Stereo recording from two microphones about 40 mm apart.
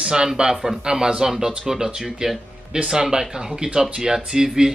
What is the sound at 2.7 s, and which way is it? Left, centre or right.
Speech, centre.